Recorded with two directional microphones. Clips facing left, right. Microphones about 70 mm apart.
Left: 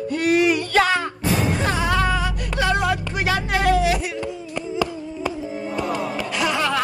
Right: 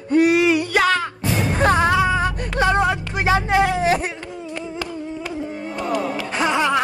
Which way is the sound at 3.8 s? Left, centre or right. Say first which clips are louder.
Right 2 dB; right.